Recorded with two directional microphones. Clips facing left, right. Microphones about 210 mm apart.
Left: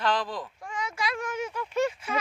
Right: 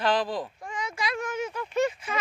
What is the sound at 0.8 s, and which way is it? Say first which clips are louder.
Speech: right 1 dB; 10° left (ahead or behind).